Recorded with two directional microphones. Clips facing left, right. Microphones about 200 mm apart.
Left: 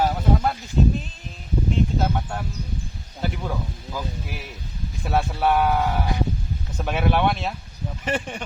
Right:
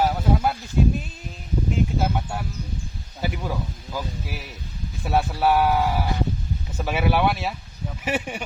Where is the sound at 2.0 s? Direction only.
5° right (ahead or behind).